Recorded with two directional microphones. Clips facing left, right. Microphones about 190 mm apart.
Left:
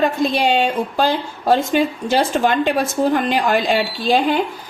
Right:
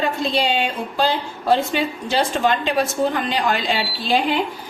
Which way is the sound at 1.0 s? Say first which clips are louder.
Right 2 dB; 50° left (ahead or behind).